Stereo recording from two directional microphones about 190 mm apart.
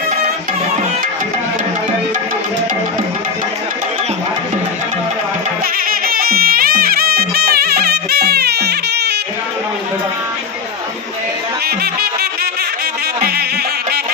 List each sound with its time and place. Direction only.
5.9 s music: 50° right (ahead or behind)
11.6 s music: 55° right (ahead or behind)